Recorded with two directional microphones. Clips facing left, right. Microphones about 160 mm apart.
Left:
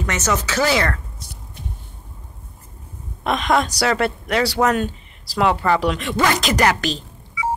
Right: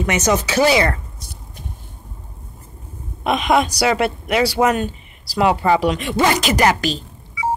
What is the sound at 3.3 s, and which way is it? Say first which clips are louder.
Speech: right 2 dB; 10° right (ahead or behind).